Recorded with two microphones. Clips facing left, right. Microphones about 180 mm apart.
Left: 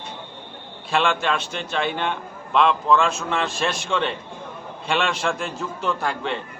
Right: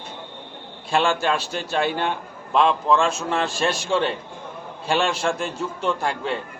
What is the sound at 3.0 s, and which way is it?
Speech, centre (ahead or behind).